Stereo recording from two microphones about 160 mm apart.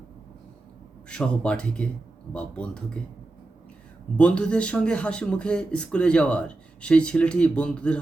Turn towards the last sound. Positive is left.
turn(degrees=5)  # may be behind; listen again after turning